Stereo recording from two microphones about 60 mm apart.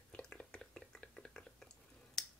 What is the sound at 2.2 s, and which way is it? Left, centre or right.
Finger snapping, centre.